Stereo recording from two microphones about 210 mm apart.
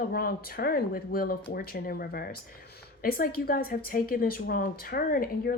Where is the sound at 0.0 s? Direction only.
45° left (ahead or behind).